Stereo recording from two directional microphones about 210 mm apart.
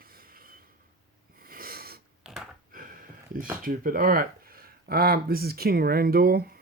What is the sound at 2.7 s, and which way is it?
Speech, 40° right (ahead or behind).